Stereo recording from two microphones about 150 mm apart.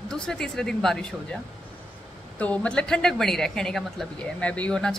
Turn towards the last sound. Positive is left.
turn(degrees=5)  # may be behind; listen again after turning